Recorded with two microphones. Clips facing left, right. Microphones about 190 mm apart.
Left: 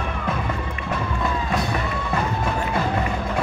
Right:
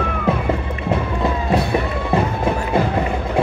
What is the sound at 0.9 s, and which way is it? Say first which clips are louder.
Music: right 5 dB; 30° right (ahead or behind).